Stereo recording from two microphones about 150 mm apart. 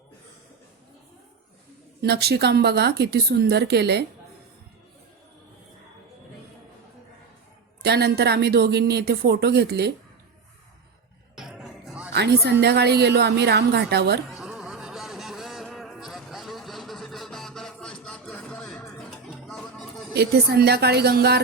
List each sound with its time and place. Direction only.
2.0 s speech: 90° right
7.8 s speech: 90° right
11.3 s music: 5° right (ahead or behind)
12.1 s speech: 90° right
14.3 s music: 5° right (ahead or behind)
20.1 s speech: 90° right